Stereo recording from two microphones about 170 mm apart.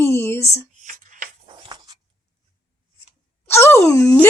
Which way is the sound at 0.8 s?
50° right (ahead or behind).